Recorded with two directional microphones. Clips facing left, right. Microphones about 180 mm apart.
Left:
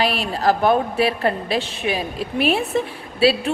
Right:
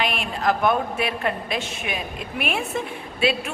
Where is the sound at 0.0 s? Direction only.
35° left (ahead or behind).